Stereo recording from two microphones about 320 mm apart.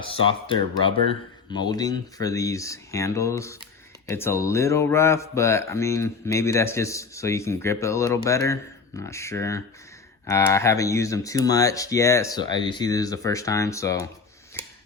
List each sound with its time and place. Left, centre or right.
0.0 s speech: centre